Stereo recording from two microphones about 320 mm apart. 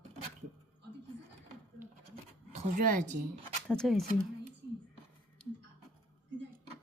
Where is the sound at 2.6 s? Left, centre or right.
Right.